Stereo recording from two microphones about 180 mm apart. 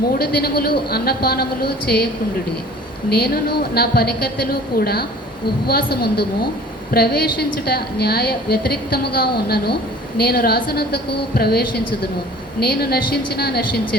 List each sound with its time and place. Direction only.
0.0 s a woman's voice: 60° left (ahead or behind)
3.1 s a woman's voice: 60° left (ahead or behind)